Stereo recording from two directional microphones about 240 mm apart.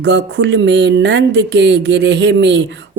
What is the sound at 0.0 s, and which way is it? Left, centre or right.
Speech, right.